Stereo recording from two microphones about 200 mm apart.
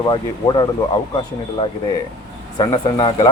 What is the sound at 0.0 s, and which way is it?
Speech, 20° left (ahead or behind).